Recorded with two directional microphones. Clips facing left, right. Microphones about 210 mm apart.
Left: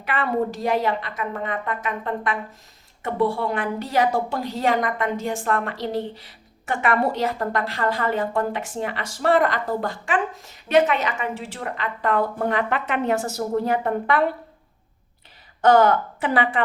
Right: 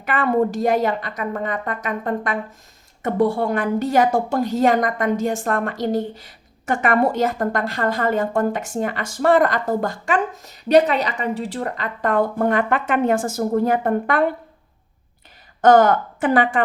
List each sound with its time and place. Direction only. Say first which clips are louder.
0.0 s a woman's voice: right 5 dB; 45° right (ahead or behind)
15.6 s a woman's voice: right 3 dB; 50° right (ahead or behind)